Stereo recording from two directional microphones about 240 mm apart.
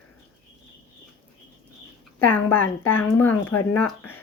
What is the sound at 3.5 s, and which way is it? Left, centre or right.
Speech, left.